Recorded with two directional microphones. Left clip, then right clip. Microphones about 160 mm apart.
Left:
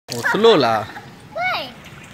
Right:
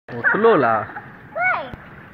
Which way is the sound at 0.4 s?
15° left (ahead or behind).